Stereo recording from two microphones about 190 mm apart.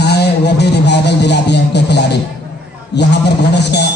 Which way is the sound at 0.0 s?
60° left (ahead or behind).